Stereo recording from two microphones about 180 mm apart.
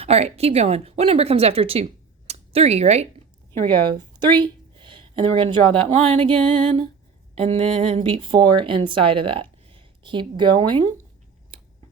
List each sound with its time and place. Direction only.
0.0 s speech: 35° right (ahead or behind)
3.9 s speech: 25° right (ahead or behind)